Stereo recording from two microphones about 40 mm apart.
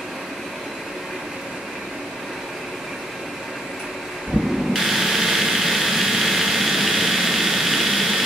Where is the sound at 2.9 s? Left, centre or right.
Centre.